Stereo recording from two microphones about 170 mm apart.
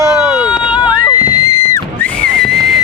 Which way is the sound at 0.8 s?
25° left (ahead or behind).